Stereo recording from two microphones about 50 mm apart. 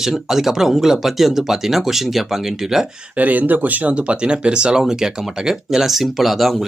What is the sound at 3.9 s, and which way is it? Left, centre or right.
Speech, right.